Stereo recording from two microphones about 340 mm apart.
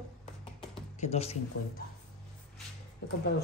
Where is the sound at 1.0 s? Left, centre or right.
Centre.